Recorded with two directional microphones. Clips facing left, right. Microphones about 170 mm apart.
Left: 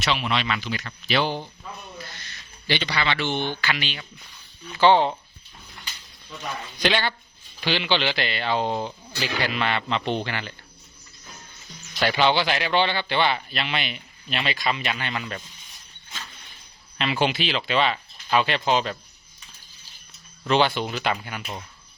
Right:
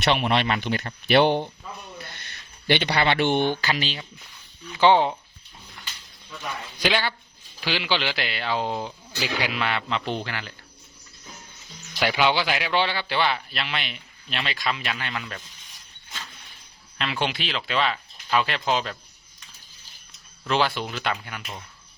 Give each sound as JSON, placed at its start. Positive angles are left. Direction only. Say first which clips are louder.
{"t": 0.0, "sound": "speech", "louder": "right 3 dB", "side_deg": -55}
{"t": 2.6, "sound": "speech", "louder": "right 4 dB", "side_deg": -55}
{"t": 3.8, "sound": "speech", "louder": "right 3 dB", "side_deg": -35}
{"t": 4.8, "sound": "speech", "louder": "even", "side_deg": -15}
{"t": 6.7, "sound": "speech", "louder": "left 1 dB", "side_deg": -5}
{"t": 11.9, "sound": "speech", "louder": "left 1 dB", "side_deg": -5}
{"t": 17.0, "sound": "speech", "louder": "left 4 dB", "side_deg": 0}
{"t": 20.5, "sound": "speech", "louder": "left 3 dB", "side_deg": 0}